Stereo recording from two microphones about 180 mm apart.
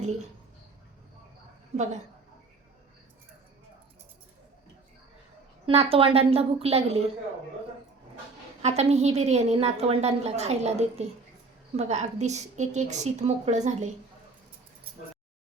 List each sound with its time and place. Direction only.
1.7 s a woman's voice: 40° right (ahead or behind)
5.6 s a woman's voice: 35° right (ahead or behind)
8.6 s a woman's voice: 35° right (ahead or behind)